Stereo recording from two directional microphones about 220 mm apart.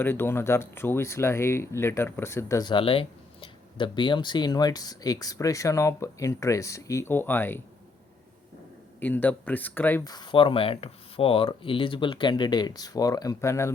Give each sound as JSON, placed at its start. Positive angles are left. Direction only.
{"t": 0.0, "sound": "speech", "side_deg": 10}
{"t": 9.0, "sound": "speech", "side_deg": 10}